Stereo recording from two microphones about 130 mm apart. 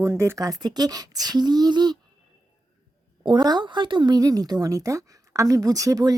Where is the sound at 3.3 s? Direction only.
35° right (ahead or behind).